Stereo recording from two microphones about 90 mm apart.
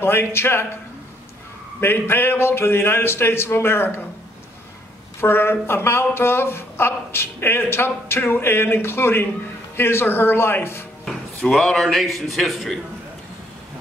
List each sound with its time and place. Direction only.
0.0 s speech: 25° left (ahead or behind)
1.8 s speech: 25° left (ahead or behind)
5.2 s speech: 25° left (ahead or behind)
11.1 s speech: 5° left (ahead or behind)